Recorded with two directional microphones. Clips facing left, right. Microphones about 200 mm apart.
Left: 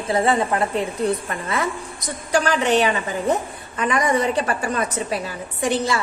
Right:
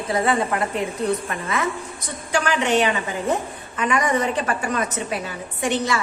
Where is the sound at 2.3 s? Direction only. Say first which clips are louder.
Left 2 dB; 40° left (ahead or behind).